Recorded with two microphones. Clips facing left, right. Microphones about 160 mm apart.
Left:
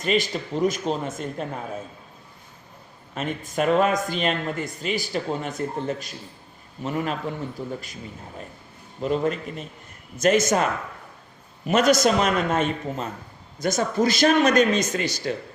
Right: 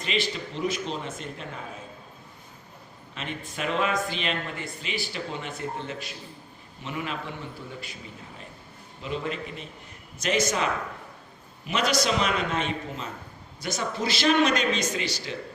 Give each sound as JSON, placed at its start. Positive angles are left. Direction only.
{"t": 0.0, "sound": "speech", "side_deg": 45}
{"t": 3.2, "sound": "speech", "side_deg": 45}
{"t": 9.0, "sound": "speech", "side_deg": 45}